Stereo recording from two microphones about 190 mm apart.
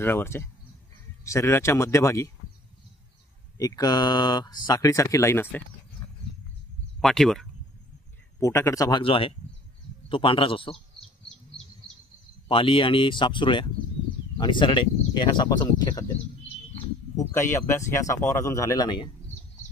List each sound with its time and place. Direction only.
0.0 s speech: 10° left (ahead or behind)
3.5 s speech: 20° left (ahead or behind)
7.0 s speech: centre (ahead or behind)
8.4 s speech: 15° left (ahead or behind)
11.0 s bee: 5° left (ahead or behind)
12.4 s speech: 30° left (ahead or behind)